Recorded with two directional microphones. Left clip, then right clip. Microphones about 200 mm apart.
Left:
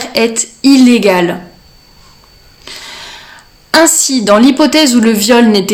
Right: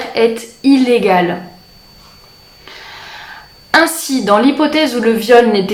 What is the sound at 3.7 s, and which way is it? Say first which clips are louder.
A woman's voice: left 3 dB; 45° left (ahead or behind).